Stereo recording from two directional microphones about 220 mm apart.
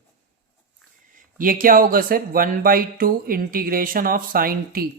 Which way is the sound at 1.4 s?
40° right (ahead or behind).